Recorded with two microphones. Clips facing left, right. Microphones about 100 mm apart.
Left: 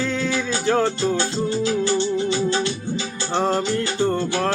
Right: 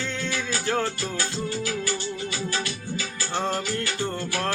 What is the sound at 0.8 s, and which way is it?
Music, 20° left (ahead or behind).